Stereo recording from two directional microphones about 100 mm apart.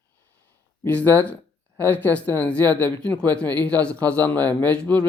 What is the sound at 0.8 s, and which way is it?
Speech, 15° left (ahead or behind).